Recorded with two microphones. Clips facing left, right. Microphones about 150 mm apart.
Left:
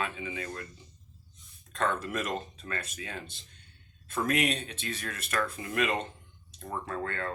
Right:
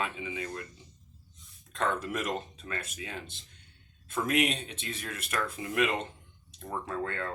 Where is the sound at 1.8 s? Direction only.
20° right (ahead or behind).